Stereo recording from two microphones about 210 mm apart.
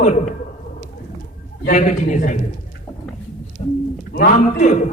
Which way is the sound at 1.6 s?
40° left (ahead or behind).